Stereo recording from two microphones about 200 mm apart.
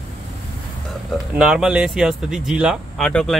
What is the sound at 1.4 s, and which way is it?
Speech, 5° right (ahead or behind).